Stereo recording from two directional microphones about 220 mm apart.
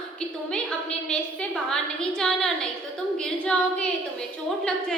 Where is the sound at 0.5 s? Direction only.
5° left (ahead or behind).